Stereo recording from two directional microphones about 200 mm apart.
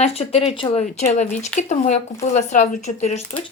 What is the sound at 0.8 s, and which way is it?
Speech, 35° left (ahead or behind).